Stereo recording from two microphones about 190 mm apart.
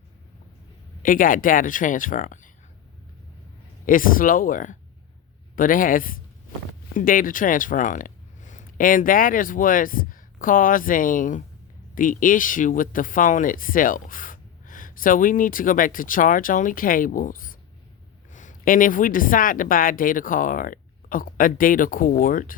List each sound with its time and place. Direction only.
1.0 s speech: 45° left (ahead or behind)
3.8 s speech: 45° left (ahead or behind)